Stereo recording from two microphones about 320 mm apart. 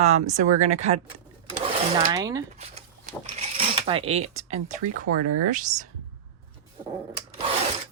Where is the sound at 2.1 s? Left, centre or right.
Centre.